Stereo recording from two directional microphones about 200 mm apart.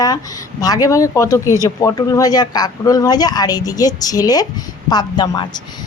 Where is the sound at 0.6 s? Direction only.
20° left (ahead or behind).